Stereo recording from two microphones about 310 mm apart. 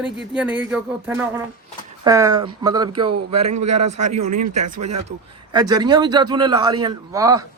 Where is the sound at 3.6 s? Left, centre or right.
Right.